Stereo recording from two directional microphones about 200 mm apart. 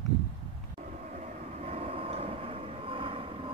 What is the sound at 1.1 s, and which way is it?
Train, 35° right (ahead or behind).